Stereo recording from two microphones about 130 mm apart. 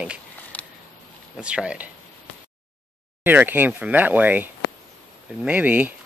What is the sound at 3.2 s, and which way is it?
Speech, 15° right (ahead or behind).